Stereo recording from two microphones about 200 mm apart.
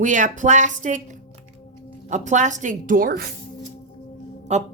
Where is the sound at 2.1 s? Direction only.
35° right (ahead or behind).